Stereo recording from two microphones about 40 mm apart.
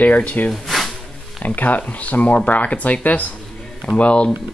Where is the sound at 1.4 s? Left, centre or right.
Left.